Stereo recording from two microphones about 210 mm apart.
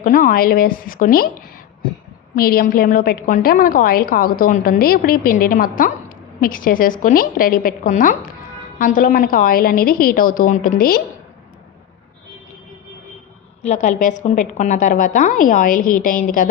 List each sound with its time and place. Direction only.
0.0 s a woman's voice: 40° left (ahead or behind)
2.3 s a woman's voice: 45° left (ahead or behind)
13.6 s a woman's voice: 35° left (ahead or behind)